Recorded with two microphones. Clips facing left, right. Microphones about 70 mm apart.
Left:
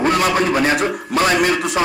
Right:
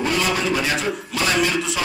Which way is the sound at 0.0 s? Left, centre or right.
Left.